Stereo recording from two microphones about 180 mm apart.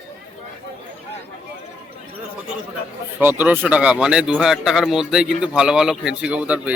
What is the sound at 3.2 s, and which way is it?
A man's voice, 10° right (ahead or behind).